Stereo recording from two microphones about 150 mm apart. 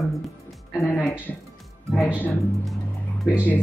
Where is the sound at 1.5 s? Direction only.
Centre (ahead or behind).